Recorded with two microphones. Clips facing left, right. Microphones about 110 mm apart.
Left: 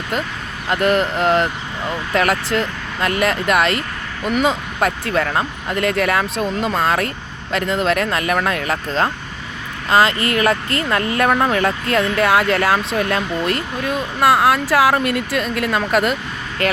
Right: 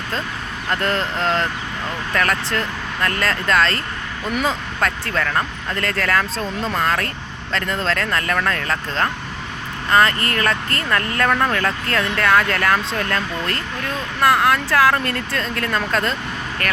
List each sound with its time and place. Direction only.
0.7 s speech: 15° left (ahead or behind)